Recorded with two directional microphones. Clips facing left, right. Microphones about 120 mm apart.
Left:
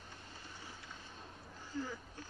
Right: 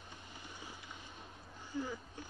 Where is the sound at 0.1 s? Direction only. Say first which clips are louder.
Right 2 dB; 15° right (ahead or behind).